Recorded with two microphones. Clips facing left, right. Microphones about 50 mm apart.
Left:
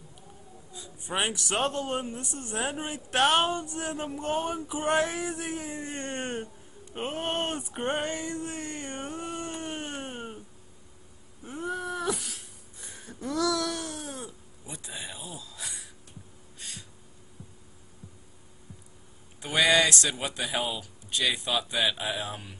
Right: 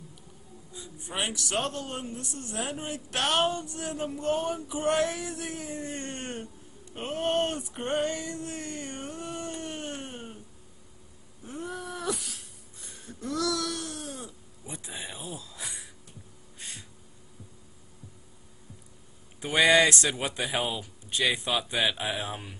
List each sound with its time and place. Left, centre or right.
1.0 s a man's voice: left
11.4 s a sound: centre
14.6 s speech: centre
15.2 s speech: right
16.5 s a sound: right
19.4 s speech: right